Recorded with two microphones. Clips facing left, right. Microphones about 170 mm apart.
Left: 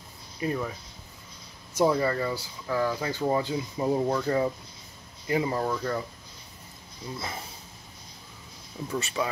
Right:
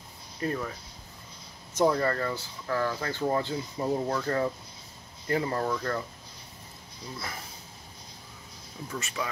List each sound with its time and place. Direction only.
0.4 s speech: 10° left (ahead or behind)
1.7 s speech: 10° left (ahead or behind)
7.2 s speech: 25° left (ahead or behind)
8.9 s speech: 30° left (ahead or behind)